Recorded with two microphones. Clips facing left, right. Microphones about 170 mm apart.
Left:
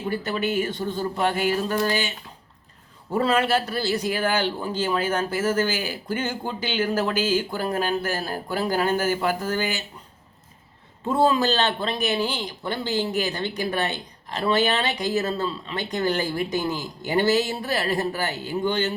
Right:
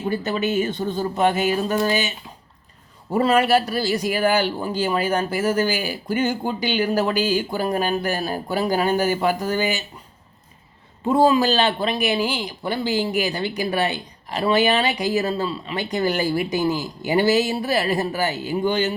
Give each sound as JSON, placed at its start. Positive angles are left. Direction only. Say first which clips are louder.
{"t": 0.1, "sound": "speech", "louder": "right 3 dB", "side_deg": -20}
{"t": 11.0, "sound": "speech", "louder": "right 4 dB", "side_deg": -15}